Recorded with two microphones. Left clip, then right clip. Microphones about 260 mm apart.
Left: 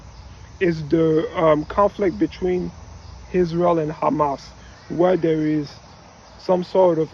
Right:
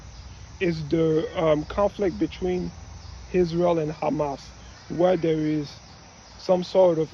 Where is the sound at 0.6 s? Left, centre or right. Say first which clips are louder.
Left 5 dB; centre.